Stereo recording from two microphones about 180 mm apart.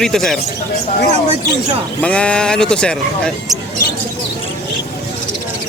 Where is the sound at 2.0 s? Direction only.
5° left (ahead or behind).